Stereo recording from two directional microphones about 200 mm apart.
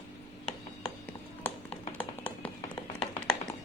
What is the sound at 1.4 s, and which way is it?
Tap, 10° left (ahead or behind).